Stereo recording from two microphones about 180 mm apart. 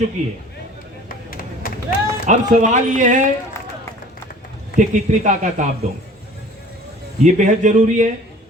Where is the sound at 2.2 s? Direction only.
45° right (ahead or behind).